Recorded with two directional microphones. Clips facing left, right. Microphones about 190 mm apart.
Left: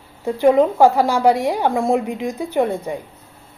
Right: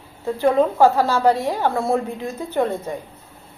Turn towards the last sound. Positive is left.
turn(degrees=15)  # may be behind; listen again after turning